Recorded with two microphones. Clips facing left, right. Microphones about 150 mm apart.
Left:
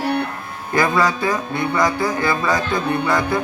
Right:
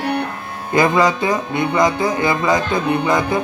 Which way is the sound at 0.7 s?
20° right (ahead or behind).